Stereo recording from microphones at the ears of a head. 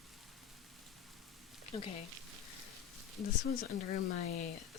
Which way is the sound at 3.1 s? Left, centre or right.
Left.